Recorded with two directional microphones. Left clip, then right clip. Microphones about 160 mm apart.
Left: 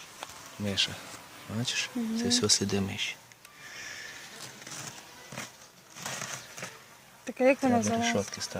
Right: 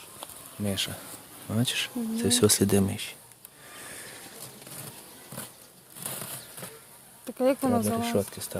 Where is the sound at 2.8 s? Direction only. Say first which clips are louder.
Left 1 dB; 40° right (ahead or behind).